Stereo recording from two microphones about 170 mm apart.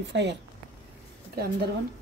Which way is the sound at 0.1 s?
90° right.